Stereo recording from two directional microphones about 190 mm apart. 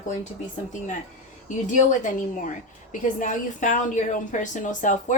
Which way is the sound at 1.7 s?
40° left (ahead or behind).